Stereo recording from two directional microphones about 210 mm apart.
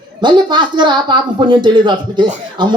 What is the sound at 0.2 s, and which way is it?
Speech, 20° right (ahead or behind).